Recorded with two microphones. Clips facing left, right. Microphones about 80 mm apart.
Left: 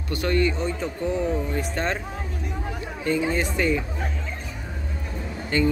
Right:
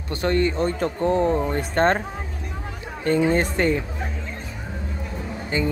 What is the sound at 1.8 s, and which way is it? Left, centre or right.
Speech, right.